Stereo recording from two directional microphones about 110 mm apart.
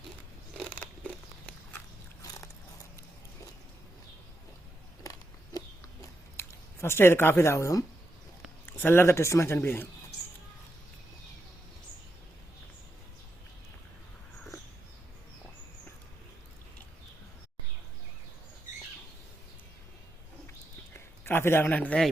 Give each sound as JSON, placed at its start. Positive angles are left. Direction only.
{"t": 5.5, "sound": "chewing", "side_deg": 30}
{"t": 8.7, "sound": "a man's voice", "side_deg": 20}
{"t": 20.9, "sound": "a sound", "side_deg": 20}